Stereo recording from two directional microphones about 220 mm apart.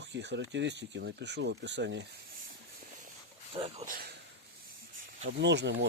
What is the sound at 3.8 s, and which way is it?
Speech, 40° right (ahead or behind).